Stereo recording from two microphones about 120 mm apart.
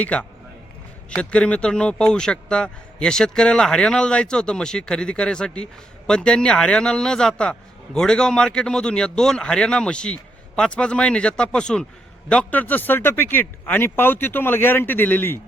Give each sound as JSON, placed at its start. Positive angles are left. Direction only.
{"t": 0.0, "sound": "a man's voice", "side_deg": 10}